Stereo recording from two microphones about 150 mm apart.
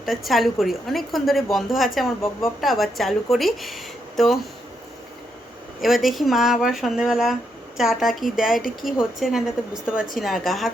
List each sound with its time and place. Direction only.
0.0 s a woman's voice: centre (ahead or behind)
5.8 s a woman's voice: centre (ahead or behind)